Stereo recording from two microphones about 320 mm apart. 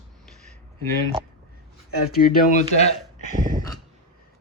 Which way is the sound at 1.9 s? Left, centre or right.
Left.